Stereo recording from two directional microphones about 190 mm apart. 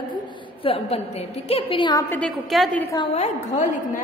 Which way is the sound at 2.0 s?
5° left (ahead or behind).